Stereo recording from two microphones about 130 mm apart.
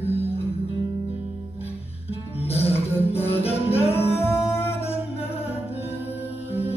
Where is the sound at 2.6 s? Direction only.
15° left (ahead or behind).